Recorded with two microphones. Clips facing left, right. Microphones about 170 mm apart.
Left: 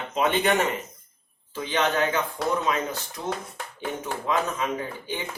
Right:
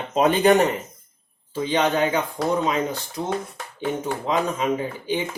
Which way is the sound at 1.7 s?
20° right (ahead or behind).